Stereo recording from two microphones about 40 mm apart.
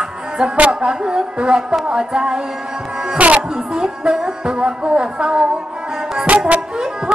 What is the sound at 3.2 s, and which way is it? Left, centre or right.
Music, right.